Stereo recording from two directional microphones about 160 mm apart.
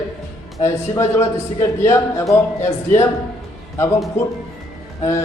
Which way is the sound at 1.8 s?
15° left (ahead or behind).